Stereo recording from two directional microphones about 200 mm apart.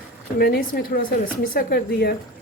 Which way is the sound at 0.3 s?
50° left (ahead or behind).